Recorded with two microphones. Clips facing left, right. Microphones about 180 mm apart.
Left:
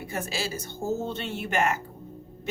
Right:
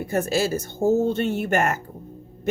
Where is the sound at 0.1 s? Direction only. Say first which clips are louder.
Right 10 dB; 45° right (ahead or behind).